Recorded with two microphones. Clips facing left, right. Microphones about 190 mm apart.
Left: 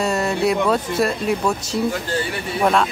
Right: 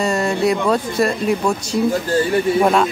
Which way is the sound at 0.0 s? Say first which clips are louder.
Right 2 dB; centre (ahead or behind).